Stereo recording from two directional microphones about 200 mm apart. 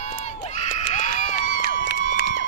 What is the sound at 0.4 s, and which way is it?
Crowd, 35° left (ahead or behind).